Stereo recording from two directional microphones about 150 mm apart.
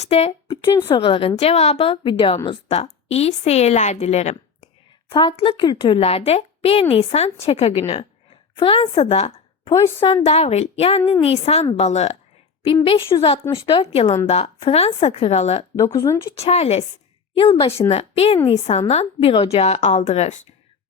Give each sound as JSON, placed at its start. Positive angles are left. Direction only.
{"t": 0.0, "sound": "speech", "side_deg": 45}
{"t": 0.4, "sound": "a woman's voice", "side_deg": 30}
{"t": 5.0, "sound": "a woman's voice", "side_deg": 30}
{"t": 12.6, "sound": "a woman's voice", "side_deg": 35}
{"t": 16.0, "sound": "speech", "side_deg": 20}
{"t": 16.3, "sound": "a woman's voice", "side_deg": 45}